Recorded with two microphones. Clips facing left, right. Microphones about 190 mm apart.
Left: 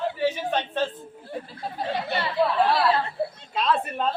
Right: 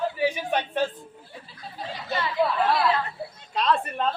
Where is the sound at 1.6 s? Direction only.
60° left (ahead or behind).